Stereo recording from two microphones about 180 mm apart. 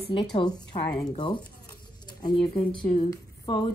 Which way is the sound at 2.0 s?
25° left (ahead or behind).